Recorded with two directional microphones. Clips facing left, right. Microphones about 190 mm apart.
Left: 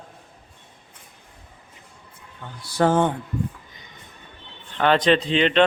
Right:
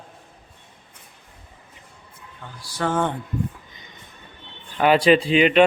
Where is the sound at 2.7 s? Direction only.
35° left (ahead or behind).